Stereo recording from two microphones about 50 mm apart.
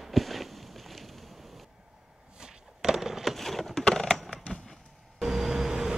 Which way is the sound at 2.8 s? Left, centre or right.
Centre.